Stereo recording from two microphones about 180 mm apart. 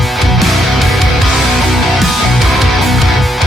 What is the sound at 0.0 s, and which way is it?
Music, centre (ahead or behind).